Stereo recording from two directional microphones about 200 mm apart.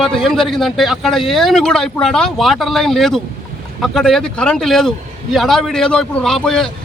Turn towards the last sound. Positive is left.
turn(degrees=0)  # may be behind; listen again after turning